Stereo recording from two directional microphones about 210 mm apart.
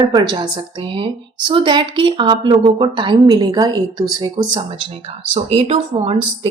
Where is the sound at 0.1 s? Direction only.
20° right (ahead or behind).